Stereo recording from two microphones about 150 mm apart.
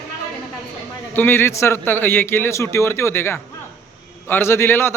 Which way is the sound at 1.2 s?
15° left (ahead or behind).